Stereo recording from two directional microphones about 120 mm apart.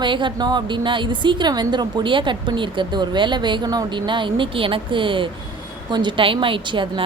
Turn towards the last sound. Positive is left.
turn(degrees=-45)  # may be behind; listen again after turning